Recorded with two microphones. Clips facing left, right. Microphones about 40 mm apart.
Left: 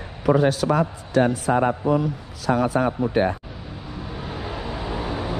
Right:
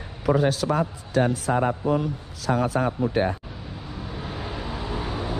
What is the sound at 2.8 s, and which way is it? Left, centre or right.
Speech, left.